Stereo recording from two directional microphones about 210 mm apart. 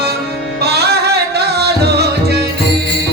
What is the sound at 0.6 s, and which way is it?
Music, 50° right (ahead or behind).